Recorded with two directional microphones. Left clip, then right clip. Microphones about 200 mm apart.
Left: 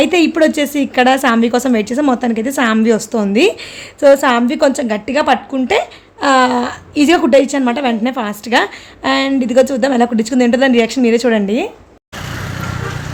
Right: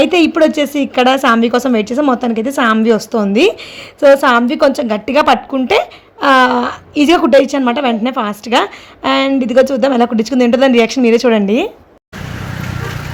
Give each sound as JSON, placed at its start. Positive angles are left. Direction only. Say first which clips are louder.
{"t": 0.0, "sound": "a woman's voice", "louder": "right 1 dB", "side_deg": -5}